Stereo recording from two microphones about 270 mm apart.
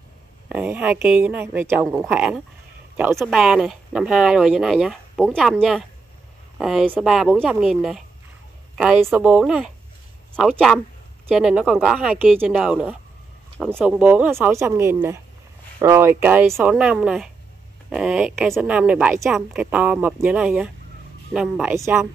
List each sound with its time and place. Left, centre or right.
0.5 s a woman's voice: centre